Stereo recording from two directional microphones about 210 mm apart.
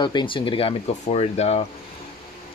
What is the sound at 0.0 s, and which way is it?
Speech, 20° left (ahead or behind).